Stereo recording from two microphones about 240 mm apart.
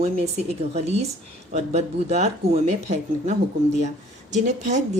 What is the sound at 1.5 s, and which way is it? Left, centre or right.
Speech, right.